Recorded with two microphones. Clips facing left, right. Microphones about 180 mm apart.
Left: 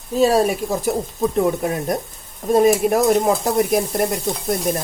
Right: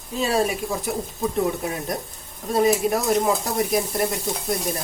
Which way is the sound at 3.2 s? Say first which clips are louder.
Left 5 dB; 55° left (ahead or behind).